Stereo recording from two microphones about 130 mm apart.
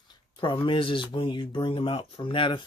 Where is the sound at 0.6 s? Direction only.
40° left (ahead or behind).